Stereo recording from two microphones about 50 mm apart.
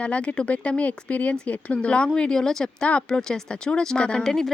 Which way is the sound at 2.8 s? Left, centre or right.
Left.